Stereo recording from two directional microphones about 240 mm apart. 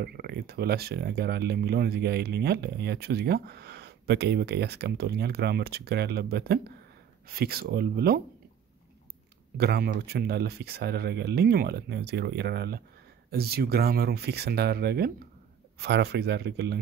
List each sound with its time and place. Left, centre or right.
0.0 s speech: right
9.6 s speech: right